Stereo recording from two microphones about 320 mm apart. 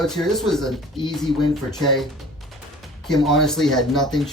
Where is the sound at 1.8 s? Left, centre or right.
Centre.